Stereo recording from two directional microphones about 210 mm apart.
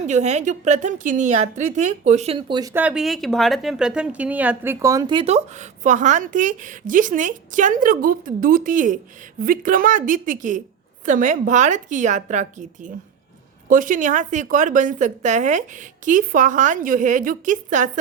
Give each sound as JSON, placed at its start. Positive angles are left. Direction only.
{"t": 0.0, "sound": "a woman's voice", "side_deg": -35}